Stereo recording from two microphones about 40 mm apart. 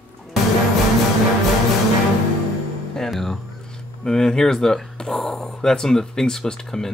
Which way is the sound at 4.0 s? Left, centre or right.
Centre.